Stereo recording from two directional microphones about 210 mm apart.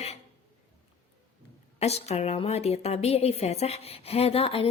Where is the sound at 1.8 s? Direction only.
30° left (ahead or behind).